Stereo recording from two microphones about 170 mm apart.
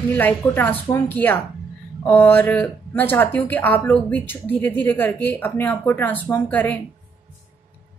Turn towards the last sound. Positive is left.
turn(degrees=10)  # may be behind; listen again after turning